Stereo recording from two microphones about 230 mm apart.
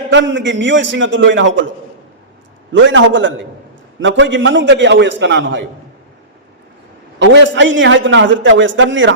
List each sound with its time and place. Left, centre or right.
0.1 s a man's voice: right
2.7 s a man's voice: right
7.2 s a man's voice: right